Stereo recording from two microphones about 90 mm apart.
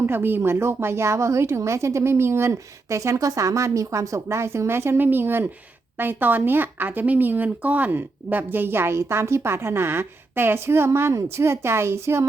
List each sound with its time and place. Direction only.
0.0 s speech: 25° right (ahead or behind)